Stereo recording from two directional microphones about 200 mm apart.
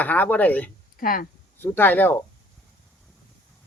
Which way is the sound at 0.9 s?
45° left (ahead or behind).